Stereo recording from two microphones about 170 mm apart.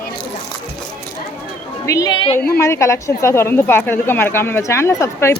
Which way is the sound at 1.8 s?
20° left (ahead or behind).